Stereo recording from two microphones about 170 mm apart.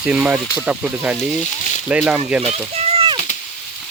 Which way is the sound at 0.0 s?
10° right (ahead or behind).